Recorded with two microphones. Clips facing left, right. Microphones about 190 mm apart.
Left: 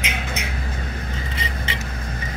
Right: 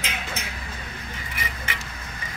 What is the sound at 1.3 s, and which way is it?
Vehicle, 25° left (ahead or behind).